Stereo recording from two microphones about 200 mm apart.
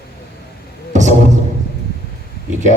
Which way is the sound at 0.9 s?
35° right (ahead or behind).